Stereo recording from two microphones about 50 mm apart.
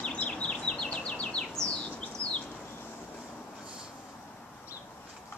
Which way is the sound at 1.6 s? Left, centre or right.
Left.